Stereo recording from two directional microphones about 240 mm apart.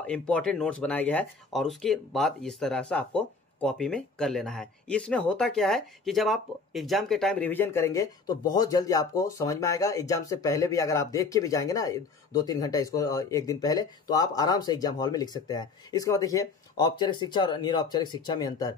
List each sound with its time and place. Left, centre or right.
0.0 s speech: centre